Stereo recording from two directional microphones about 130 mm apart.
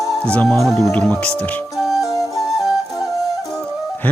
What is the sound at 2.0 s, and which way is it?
Music, 30° left (ahead or behind).